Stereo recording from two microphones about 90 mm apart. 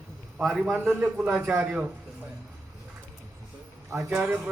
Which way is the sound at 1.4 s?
30° right (ahead or behind).